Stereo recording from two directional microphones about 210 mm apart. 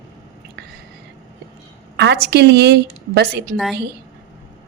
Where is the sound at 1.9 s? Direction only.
55° right (ahead or behind).